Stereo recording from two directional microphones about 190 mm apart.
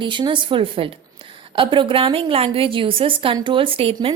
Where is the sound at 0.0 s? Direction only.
25° right (ahead or behind).